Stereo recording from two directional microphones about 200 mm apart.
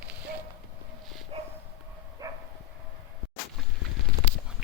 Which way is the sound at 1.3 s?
30° right (ahead or behind).